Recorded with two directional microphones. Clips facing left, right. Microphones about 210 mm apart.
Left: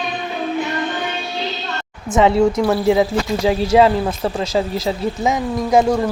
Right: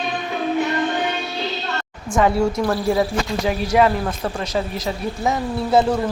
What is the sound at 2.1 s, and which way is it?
Speech, 20° left (ahead or behind).